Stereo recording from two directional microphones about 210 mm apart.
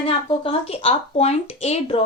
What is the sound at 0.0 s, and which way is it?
Speech, 25° left (ahead or behind).